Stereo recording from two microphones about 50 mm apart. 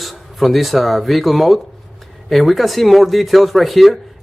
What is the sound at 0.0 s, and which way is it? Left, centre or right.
A man's voice, centre.